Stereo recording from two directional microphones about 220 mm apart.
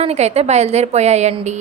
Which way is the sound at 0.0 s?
30° right (ahead or behind).